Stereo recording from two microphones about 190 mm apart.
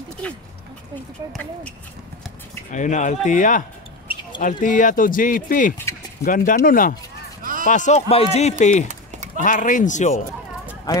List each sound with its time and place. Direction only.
1.3 s speech: 5° left (ahead or behind)
2.7 s speech: 40° left (ahead or behind)
10.9 s speech: 20° left (ahead or behind)